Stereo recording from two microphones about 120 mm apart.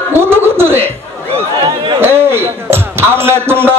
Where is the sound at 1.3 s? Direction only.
45° right (ahead or behind).